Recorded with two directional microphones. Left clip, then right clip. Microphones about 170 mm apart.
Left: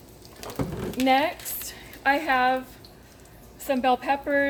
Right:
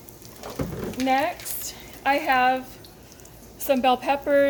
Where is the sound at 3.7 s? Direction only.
15° right (ahead or behind).